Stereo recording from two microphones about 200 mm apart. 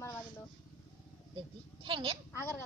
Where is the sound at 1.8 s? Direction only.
25° right (ahead or behind).